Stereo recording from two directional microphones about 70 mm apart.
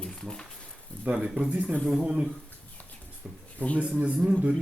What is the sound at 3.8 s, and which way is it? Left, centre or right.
Speech, centre.